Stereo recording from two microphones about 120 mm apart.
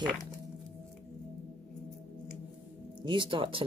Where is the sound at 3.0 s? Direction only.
40° right (ahead or behind).